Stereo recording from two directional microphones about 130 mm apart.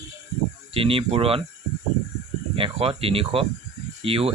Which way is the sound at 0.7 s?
45° right (ahead or behind).